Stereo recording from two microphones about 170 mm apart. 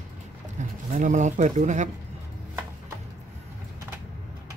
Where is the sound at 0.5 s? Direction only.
45° right (ahead or behind).